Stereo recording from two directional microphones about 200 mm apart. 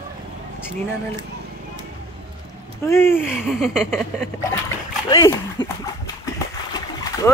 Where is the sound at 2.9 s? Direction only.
10° left (ahead or behind).